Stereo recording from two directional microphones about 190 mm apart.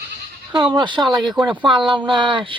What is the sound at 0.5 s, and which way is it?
Speech, 25° right (ahead or behind).